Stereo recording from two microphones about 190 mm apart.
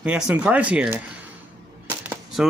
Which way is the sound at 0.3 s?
5° right (ahead or behind).